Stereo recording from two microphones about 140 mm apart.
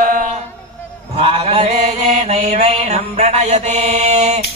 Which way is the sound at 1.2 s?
45° right (ahead or behind).